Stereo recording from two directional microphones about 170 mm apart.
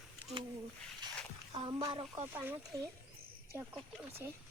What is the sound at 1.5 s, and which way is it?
A child's voice, 25° right (ahead or behind).